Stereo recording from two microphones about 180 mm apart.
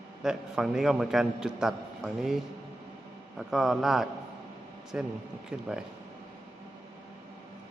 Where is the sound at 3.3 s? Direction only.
Centre (ahead or behind).